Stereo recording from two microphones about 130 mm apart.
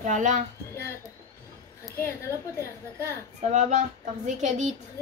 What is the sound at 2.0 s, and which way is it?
A woman's voice, 20° left (ahead or behind).